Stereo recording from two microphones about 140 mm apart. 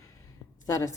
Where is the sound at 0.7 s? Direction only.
20° left (ahead or behind).